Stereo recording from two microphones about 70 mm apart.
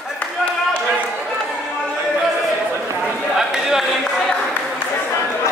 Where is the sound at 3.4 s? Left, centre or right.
Centre.